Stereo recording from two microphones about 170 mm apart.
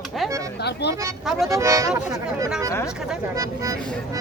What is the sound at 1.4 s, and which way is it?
Speech, 20° right (ahead or behind).